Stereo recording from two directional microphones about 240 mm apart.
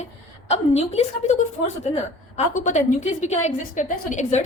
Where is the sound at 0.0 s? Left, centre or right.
Left.